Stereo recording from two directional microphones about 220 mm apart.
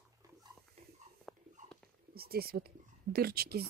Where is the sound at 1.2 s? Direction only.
5° left (ahead or behind).